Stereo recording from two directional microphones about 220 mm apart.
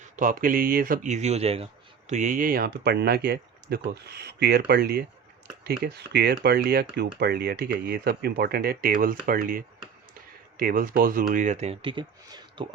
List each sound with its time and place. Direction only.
0.0 s speech: 35° right (ahead or behind); by 12.6 s 20° right (ahead or behind)